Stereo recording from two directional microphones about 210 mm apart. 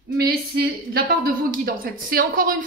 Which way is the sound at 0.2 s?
45° right (ahead or behind).